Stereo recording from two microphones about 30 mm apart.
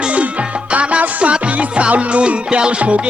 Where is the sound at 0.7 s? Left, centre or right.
Right.